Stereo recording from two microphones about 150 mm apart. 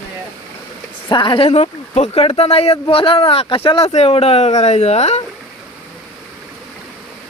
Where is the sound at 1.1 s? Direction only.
35° left (ahead or behind).